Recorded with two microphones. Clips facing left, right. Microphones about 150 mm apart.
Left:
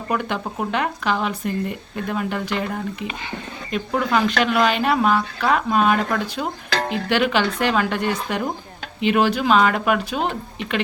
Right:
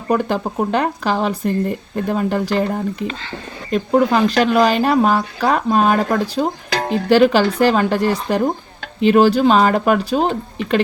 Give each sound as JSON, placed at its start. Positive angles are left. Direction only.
{"t": 0.1, "sound": "speech", "side_deg": -35}